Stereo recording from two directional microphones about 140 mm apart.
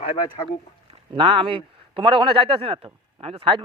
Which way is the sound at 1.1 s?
40° right (ahead or behind).